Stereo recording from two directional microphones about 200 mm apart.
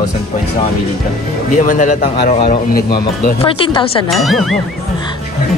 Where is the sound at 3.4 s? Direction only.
25° left (ahead or behind).